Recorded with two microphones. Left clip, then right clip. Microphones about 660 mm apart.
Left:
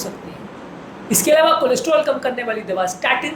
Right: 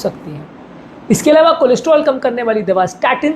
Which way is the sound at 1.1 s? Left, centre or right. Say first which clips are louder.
Right 4 dB; right.